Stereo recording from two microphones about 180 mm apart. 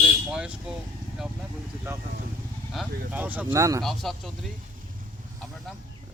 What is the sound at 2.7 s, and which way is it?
Speech, 10° right (ahead or behind).